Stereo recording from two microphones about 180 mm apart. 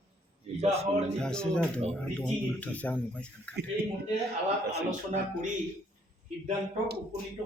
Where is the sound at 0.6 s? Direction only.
35° right (ahead or behind).